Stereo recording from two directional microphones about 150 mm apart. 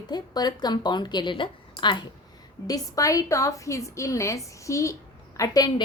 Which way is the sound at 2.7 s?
20° left (ahead or behind).